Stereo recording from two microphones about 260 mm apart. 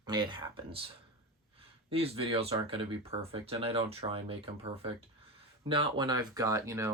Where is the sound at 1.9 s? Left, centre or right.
Right.